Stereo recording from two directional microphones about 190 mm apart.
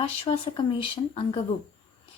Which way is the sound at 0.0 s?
25° left (ahead or behind).